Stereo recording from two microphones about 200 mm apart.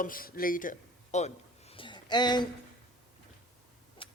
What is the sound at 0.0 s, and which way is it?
Speech, 45° left (ahead or behind).